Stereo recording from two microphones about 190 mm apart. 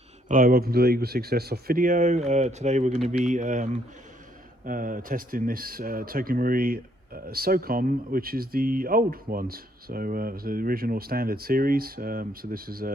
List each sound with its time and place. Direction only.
0.3 s speech: 50° right (ahead or behind)